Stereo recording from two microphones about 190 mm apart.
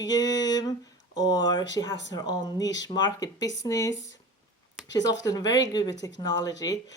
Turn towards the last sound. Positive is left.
turn(degrees=20)  # may be behind; listen again after turning